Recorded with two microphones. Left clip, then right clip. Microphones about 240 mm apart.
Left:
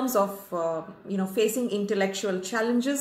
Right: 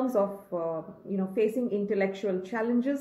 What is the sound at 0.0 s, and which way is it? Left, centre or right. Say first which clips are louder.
Speech: left 2 dB; left.